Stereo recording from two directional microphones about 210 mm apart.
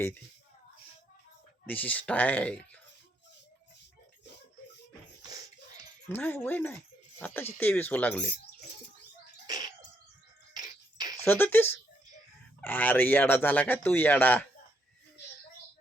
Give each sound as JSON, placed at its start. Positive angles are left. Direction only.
{"t": 1.6, "sound": "speech", "side_deg": 5}
{"t": 6.1, "sound": "speech", "side_deg": 10}
{"t": 9.5, "sound": "bird", "side_deg": -20}
{"t": 10.5, "sound": "a sound", "side_deg": -20}
{"t": 11.3, "sound": "speech", "side_deg": 10}